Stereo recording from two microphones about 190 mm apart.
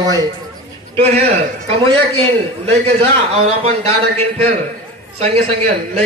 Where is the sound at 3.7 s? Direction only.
35° right (ahead or behind).